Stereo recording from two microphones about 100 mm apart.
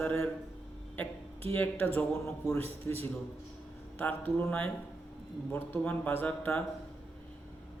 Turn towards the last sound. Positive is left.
turn(degrees=20)  # may be behind; listen again after turning